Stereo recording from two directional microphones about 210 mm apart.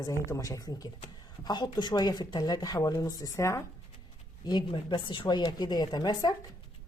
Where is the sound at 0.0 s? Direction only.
15° left (ahead or behind).